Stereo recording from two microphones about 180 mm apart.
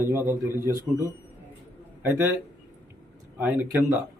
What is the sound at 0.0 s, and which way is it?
A man's voice, 15° right (ahead or behind).